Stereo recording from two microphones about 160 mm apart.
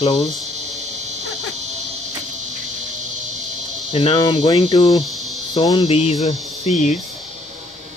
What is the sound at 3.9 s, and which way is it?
Cricket, 35° left (ahead or behind).